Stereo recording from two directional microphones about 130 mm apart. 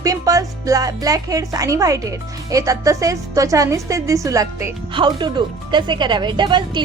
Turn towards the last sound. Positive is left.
turn(degrees=-35)  # may be behind; listen again after turning